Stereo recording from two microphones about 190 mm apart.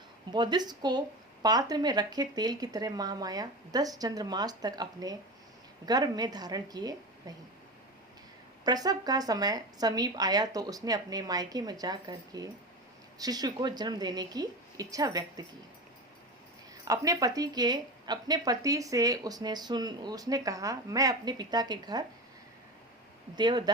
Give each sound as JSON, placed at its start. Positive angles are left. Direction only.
{"t": 0.3, "sound": "speech", "side_deg": -25}
{"t": 8.6, "sound": "speech", "side_deg": -20}
{"t": 16.8, "sound": "speech", "side_deg": -20}
{"t": 23.3, "sound": "speech", "side_deg": -20}